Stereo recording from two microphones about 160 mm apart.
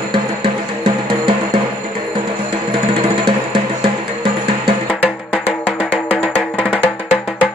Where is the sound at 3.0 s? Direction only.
35° right (ahead or behind).